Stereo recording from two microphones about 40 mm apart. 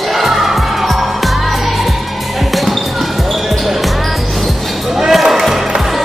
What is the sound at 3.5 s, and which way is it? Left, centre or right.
Basketball bounce, centre.